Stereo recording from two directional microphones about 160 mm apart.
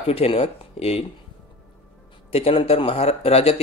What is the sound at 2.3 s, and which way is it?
Speech, 35° left (ahead or behind).